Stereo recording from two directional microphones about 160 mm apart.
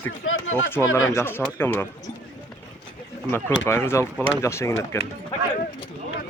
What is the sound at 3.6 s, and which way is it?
Speech, 15° left (ahead or behind).